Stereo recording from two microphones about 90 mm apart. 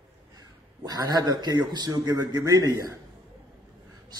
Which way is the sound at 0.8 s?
50° right (ahead or behind).